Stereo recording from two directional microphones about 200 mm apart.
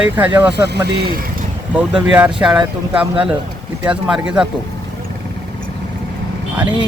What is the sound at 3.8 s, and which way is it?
Speech, 5° right (ahead or behind).